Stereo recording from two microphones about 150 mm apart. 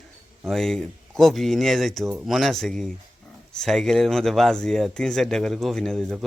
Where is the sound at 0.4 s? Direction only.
5° left (ahead or behind).